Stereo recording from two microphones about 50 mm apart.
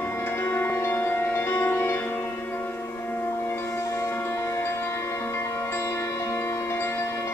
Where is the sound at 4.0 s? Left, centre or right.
Left.